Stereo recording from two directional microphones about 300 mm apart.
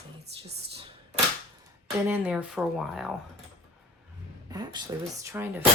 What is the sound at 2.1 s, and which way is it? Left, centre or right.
Speech, centre.